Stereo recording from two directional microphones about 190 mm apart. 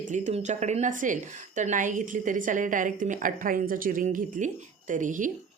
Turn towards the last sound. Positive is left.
turn(degrees=-45)  # may be behind; listen again after turning